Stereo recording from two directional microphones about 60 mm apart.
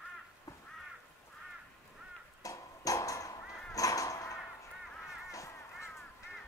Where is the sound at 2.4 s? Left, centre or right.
Left.